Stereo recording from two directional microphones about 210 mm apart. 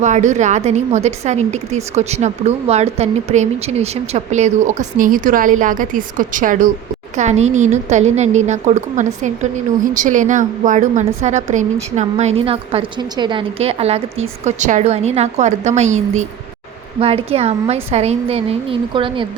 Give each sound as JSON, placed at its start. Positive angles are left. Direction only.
{"t": 0.0, "sound": "a woman's voice", "side_deg": -35}